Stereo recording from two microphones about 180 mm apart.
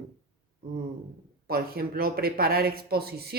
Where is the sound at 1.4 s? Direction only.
55° right (ahead or behind).